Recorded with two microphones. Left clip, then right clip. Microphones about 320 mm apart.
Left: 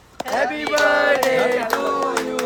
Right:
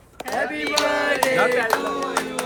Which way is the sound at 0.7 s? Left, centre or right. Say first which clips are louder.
Left 5 dB; left.